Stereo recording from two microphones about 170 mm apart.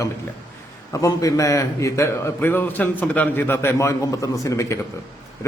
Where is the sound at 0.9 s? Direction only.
20° left (ahead or behind).